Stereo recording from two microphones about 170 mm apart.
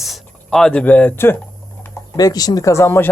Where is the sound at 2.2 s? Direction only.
20° left (ahead or behind).